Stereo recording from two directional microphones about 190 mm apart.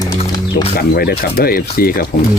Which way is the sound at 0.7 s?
55° left (ahead or behind).